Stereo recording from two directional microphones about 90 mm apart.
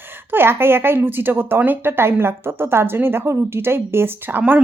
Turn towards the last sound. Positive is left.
turn(degrees=-25)  # may be behind; listen again after turning